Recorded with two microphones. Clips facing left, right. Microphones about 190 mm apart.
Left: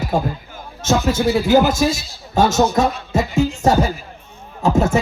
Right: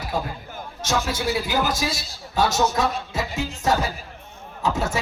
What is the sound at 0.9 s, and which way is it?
A man's voice, 45° left (ahead or behind).